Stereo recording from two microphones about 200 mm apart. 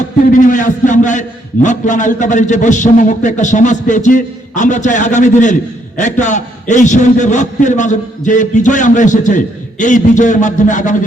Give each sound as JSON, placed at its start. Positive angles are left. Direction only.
{"t": 0.3, "sound": "a man's voice", "side_deg": 40}